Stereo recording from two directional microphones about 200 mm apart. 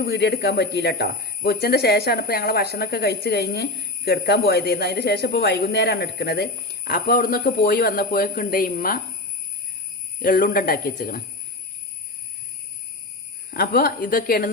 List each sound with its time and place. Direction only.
0.0 s speech: 55° left (ahead or behind)
10.2 s speech: 45° left (ahead or behind)
13.5 s speech: 50° left (ahead or behind)